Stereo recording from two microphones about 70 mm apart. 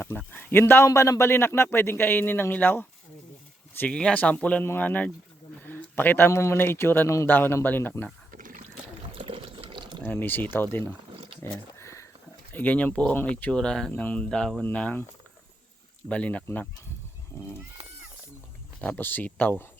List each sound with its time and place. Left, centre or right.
0.3 s a man's voice: left
0.9 s a man's voice: left
3.8 s speech: centre
4.6 s speech: left
9.7 s mechanisms: right
10.1 s speech: left
14.3 s speech: centre
14.6 s speech: left
16.0 s speech: centre
17.3 s a man's voice: left
18.8 s speech: left